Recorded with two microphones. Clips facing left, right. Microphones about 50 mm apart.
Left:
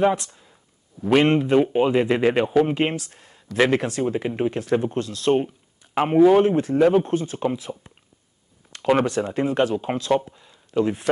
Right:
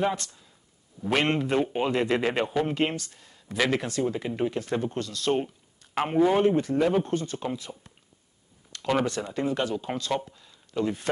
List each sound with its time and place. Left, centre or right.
0.0 s speech: centre
0.3 s a sound: left
1.1 s speech: centre
3.1 s a sound: left
3.5 s speech: left
4.7 s speech: centre
9.0 s speech: left
9.9 s speech: centre